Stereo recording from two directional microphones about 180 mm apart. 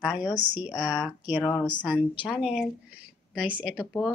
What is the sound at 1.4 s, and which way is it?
Speech, 25° left (ahead or behind).